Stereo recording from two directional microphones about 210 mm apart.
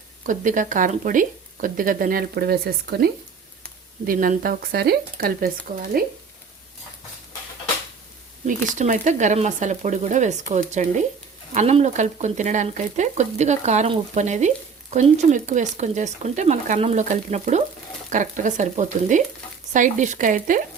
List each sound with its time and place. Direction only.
0.3 s speech: 40° right (ahead or behind)
8.4 s speech: 40° right (ahead or behind)